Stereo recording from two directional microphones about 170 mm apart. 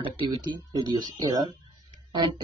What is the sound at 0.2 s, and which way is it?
Speech, 25° right (ahead or behind).